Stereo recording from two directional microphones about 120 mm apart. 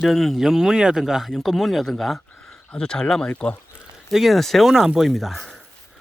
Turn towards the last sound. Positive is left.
turn(degrees=0)  # may be behind; listen again after turning